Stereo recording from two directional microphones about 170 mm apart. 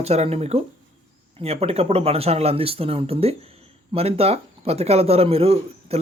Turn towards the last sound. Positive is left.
turn(degrees=-35)  # may be behind; listen again after turning